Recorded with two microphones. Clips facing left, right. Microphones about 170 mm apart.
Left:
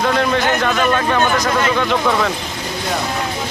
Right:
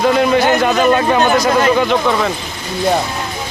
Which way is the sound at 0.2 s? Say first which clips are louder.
Right 4 dB; 15° right (ahead or behind).